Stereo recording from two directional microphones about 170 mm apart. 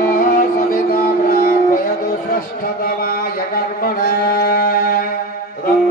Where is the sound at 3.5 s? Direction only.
60° left (ahead or behind).